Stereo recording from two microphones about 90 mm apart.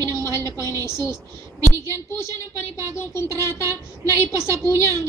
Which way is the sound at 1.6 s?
35° right (ahead or behind).